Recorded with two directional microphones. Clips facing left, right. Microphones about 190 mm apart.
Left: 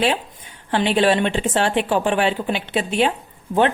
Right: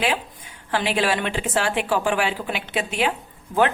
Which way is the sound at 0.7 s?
25° left (ahead or behind).